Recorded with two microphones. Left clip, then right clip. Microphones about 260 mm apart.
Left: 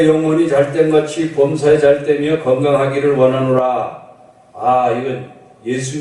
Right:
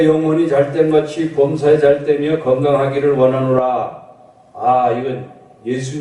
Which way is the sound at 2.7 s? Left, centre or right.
Centre.